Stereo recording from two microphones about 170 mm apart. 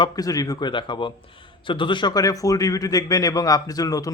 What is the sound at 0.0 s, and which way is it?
A man's voice, 20° left (ahead or behind).